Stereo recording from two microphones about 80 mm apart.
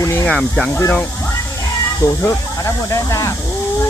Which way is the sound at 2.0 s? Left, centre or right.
Left.